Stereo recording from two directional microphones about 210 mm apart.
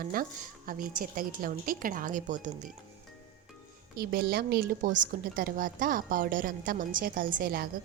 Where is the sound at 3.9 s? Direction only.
45° right (ahead or behind).